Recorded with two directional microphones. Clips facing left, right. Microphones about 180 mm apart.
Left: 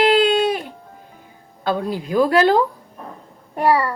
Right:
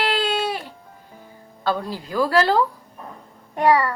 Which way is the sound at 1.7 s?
20° left (ahead or behind).